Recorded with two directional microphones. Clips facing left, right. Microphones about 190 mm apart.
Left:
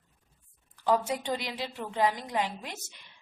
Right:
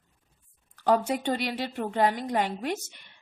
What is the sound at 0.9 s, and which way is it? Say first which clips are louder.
A woman's voice: right 3 dB; 55° right (ahead or behind).